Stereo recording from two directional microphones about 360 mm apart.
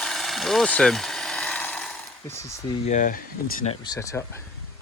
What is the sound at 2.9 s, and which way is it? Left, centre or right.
Speech, left.